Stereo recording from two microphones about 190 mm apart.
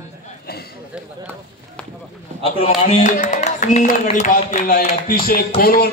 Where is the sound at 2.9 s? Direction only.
40° left (ahead or behind).